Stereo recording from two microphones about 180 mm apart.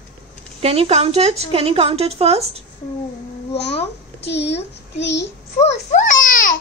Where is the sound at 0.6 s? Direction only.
35° right (ahead or behind).